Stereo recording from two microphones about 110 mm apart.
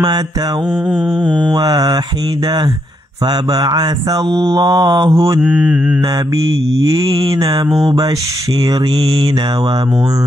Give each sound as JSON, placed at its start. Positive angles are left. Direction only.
{"t": 1.5, "sound": "mantra", "side_deg": -35}
{"t": 3.5, "sound": "mantra", "side_deg": -40}
{"t": 5.4, "sound": "mantra", "side_deg": -10}
{"t": 6.9, "sound": "mantra", "side_deg": -30}